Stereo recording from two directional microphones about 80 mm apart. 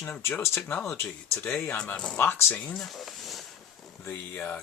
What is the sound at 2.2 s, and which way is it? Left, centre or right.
Speech, left.